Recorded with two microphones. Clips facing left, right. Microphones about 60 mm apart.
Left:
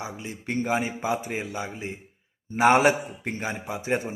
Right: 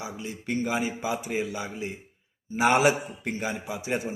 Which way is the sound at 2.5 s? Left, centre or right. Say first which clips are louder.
Left 3 dB; left.